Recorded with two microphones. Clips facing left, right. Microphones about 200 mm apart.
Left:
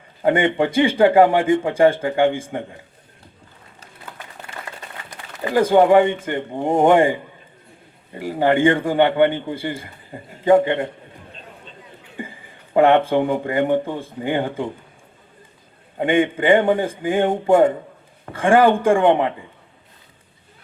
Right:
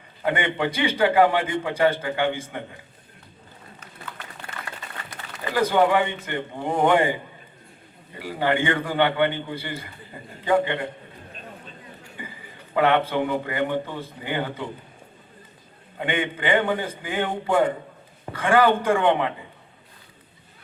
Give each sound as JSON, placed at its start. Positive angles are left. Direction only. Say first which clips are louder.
{"t": 0.3, "sound": "a man's voice", "louder": "left 7 dB", "side_deg": 45}
{"t": 5.5, "sound": "a man's voice", "louder": "left 7 dB", "side_deg": 45}
{"t": 8.2, "sound": "a man's voice", "louder": "left 7 dB", "side_deg": 45}
{"t": 12.2, "sound": "a sound", "louder": "left 8 dB", "side_deg": 45}
{"t": 12.7, "sound": "a man's voice", "louder": "left 6 dB", "side_deg": 45}
{"t": 16.0, "sound": "a man's voice", "louder": "left 9 dB", "side_deg": 45}